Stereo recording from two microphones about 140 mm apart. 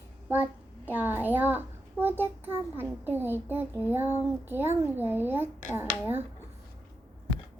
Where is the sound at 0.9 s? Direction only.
15° right (ahead or behind).